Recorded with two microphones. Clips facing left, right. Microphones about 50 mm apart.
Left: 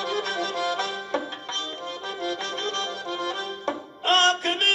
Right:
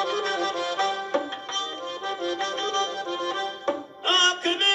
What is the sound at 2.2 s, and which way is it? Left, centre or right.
Music, right.